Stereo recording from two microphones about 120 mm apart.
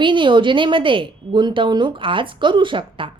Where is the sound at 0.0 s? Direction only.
45° right (ahead or behind).